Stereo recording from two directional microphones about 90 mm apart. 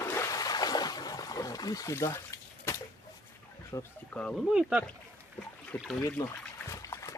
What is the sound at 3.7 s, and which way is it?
Speech, 40° left (ahead or behind).